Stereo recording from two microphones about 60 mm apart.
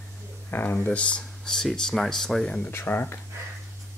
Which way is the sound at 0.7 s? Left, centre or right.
Left.